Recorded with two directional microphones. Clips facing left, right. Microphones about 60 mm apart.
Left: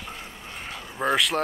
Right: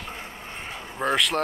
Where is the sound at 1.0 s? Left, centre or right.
Centre.